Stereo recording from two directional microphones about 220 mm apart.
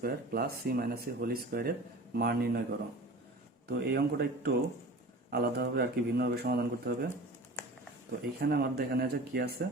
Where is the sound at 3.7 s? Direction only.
45° right (ahead or behind).